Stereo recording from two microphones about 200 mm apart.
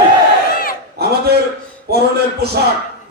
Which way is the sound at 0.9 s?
50° right (ahead or behind).